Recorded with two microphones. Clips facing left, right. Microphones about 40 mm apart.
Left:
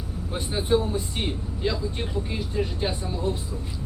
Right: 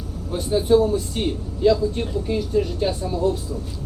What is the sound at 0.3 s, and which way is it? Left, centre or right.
Speech, left.